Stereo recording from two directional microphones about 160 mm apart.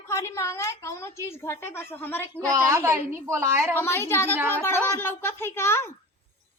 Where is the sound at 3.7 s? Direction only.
15° left (ahead or behind).